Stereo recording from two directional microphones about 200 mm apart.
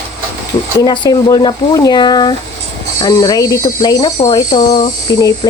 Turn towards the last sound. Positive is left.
turn(degrees=20)  # may be behind; listen again after turning